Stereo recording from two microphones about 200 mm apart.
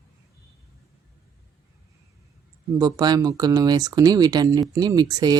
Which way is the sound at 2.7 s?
20° right (ahead or behind).